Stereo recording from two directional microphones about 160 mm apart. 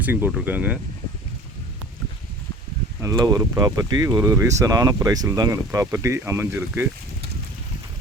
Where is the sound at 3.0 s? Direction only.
20° right (ahead or behind).